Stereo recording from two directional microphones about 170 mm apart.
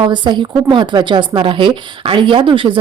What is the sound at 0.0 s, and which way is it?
Speech, 25° right (ahead or behind).